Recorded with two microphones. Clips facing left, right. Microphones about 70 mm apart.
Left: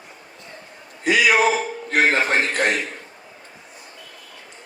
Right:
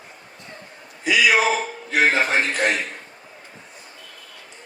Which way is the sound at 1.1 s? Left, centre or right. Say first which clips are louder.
Left 2 dB; left.